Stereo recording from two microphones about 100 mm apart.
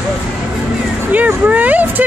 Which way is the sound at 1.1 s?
15° right (ahead or behind).